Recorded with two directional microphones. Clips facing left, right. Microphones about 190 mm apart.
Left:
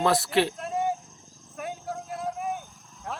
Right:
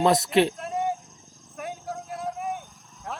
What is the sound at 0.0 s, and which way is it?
Speech, 20° right (ahead or behind).